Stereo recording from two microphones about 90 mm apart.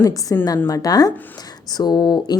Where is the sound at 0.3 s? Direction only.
35° left (ahead or behind).